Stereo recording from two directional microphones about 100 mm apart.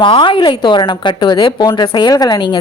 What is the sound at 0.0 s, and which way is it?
A woman's voice, 55° left (ahead or behind).